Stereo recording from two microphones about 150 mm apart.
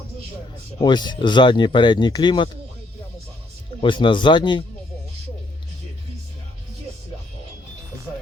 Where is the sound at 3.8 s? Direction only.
35° left (ahead or behind).